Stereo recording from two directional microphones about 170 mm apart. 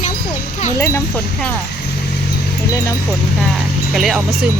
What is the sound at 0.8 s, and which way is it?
Speech, 15° left (ahead or behind).